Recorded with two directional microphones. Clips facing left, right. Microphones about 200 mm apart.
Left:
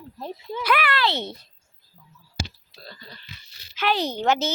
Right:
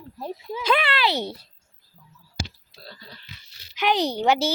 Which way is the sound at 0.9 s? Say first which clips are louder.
Right 1 dB; 15° right (ahead or behind).